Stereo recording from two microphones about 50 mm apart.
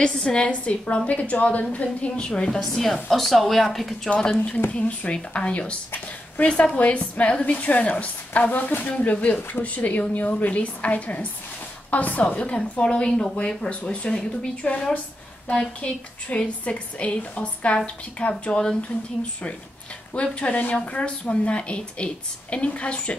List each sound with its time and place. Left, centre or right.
0.0 s a woman's voice: centre
4.1 s a woman's voice: centre
16.3 s a woman's voice: left
20.2 s a woman's voice: left